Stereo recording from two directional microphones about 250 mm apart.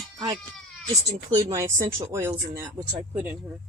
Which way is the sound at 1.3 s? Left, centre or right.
Centre.